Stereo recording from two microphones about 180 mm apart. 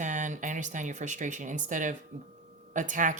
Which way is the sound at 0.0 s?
45° right (ahead or behind).